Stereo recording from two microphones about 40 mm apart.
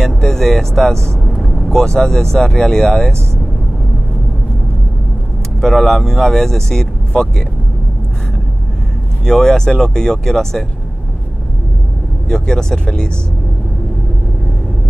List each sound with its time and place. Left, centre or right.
0.0 s speech: centre
1.4 s vehicle: centre
1.8 s speech: centre
5.9 s speech: centre
9.2 s speech: centre
12.3 s speech: centre